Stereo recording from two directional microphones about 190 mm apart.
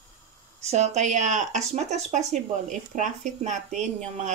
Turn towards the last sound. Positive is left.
turn(degrees=-40)  # may be behind; listen again after turning